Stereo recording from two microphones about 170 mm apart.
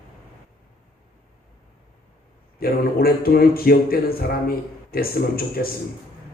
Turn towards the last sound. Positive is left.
turn(degrees=60)  # may be behind; listen again after turning